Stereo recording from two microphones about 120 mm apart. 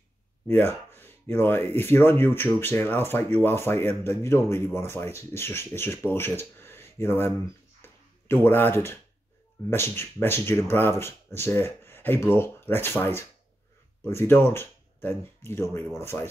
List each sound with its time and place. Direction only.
0.5 s speech: 15° left (ahead or behind)
7.8 s a sound: 20° left (ahead or behind)
9.7 s speech: 20° left (ahead or behind)